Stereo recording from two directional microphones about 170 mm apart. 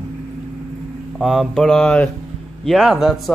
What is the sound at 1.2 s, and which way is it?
Speech, centre (ahead or behind).